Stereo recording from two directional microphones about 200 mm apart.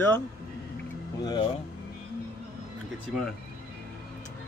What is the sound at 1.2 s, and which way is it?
Speech, 20° left (ahead or behind).